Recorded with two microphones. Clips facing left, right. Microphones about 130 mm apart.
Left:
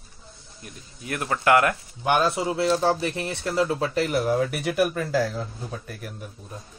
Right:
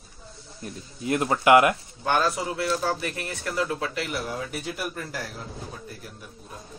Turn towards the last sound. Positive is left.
turn(degrees=60)  # may be behind; listen again after turning